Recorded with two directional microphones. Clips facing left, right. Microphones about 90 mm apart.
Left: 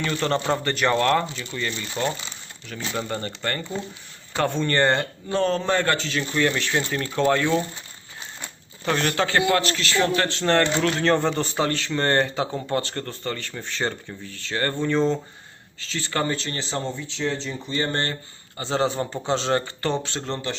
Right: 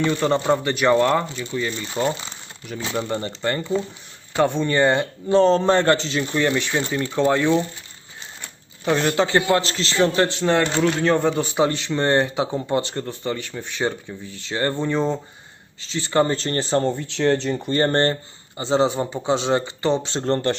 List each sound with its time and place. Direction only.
0.0 s speech: 10° right (ahead or behind)
5.3 s speech: 25° right (ahead or behind); by 7.1 s 5° right (ahead or behind)
7.3 s speech: 15° right (ahead or behind)
8.8 s speech: 10° right (ahead or behind)
10.4 s speech: 10° right (ahead or behind)
16.2 s speech: 35° right (ahead or behind)
18.5 s speech: 20° right (ahead or behind)
20.2 s speech: 50° right (ahead or behind)